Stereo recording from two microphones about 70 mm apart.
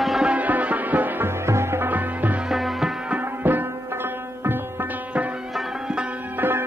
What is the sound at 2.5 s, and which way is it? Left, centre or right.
Music, centre.